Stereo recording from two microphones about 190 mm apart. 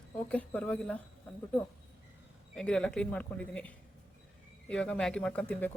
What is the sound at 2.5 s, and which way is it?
Speech, 5° left (ahead or behind).